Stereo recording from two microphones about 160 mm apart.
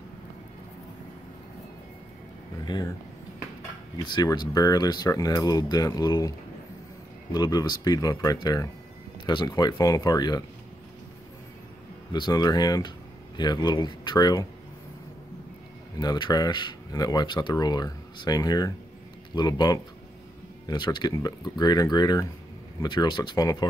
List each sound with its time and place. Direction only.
2.6 s speech: 25° left (ahead or behind)
4.0 s speech: 25° left (ahead or behind)
7.3 s speech: 25° left (ahead or behind)
12.1 s speech: 25° left (ahead or behind)
16.0 s speech: 25° left (ahead or behind)